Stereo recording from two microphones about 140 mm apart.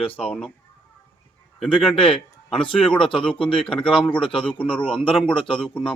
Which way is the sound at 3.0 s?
40° left (ahead or behind).